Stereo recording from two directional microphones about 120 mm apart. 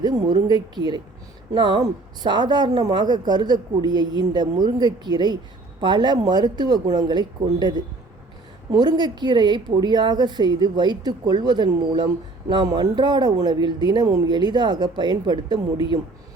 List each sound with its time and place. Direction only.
0.4 s speech: 35° right (ahead or behind)